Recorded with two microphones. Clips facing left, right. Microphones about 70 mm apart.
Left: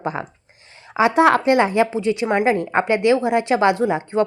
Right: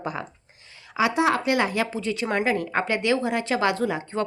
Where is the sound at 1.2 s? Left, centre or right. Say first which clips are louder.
Left 8 dB; left.